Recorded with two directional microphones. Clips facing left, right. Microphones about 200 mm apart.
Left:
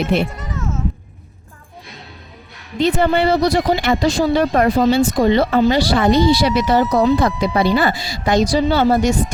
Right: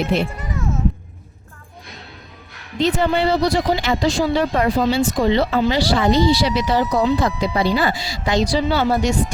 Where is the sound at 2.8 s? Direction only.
55° left (ahead or behind).